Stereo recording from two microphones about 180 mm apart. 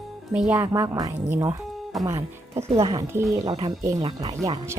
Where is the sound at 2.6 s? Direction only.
35° right (ahead or behind).